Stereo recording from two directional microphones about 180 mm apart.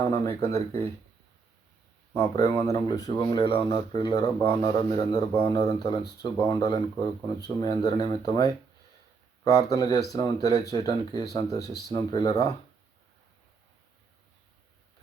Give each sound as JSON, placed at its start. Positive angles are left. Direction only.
{"t": 0.1, "sound": "speech", "side_deg": 15}
{"t": 2.1, "sound": "speech", "side_deg": 20}